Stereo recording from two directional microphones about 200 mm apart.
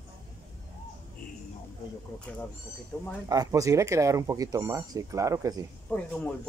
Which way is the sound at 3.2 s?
20° right (ahead or behind).